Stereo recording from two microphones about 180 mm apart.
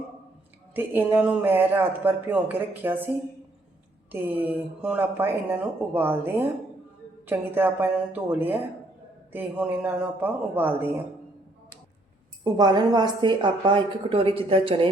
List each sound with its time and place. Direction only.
0.7 s speech: 10° right (ahead or behind)
12.5 s a woman's voice: 25° right (ahead or behind)